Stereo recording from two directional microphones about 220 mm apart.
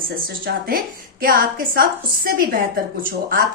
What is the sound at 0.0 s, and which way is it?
A woman's voice, 40° right (ahead or behind).